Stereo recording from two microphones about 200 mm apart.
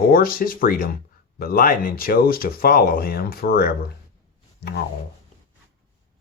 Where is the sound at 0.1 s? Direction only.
50° left (ahead or behind).